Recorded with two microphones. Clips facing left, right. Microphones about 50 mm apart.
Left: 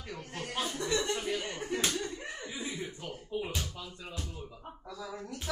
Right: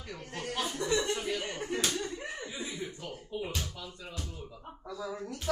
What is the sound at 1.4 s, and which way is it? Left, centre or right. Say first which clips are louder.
Speech: even; centre.